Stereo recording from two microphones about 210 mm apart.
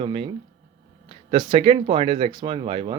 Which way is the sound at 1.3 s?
25° right (ahead or behind).